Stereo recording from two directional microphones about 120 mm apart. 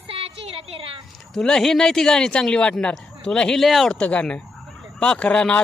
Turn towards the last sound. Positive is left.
turn(degrees=10)  # may be behind; listen again after turning